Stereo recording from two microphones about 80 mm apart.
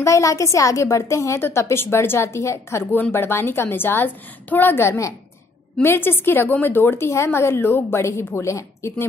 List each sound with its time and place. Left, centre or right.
0.0 s a woman's voice: left